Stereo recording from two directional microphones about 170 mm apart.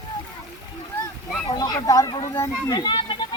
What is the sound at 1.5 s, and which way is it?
Speech, 20° left (ahead or behind).